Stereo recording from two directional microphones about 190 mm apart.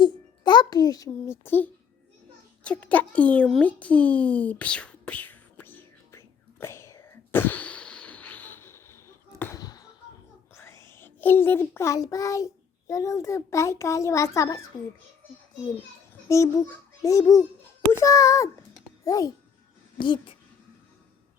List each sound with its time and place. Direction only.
0.0 s a child's voice: 25° left (ahead or behind)
2.6 s a sound: 10° left (ahead or behind)
10.5 s a child's voice: 15° left (ahead or behind)
16.3 s a child's voice: 15° left (ahead or behind)